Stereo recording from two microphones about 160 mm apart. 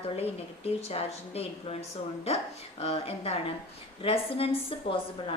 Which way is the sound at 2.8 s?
40° left (ahead or behind).